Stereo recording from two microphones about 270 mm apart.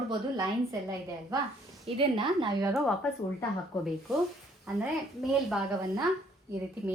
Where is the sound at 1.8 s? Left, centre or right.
Centre.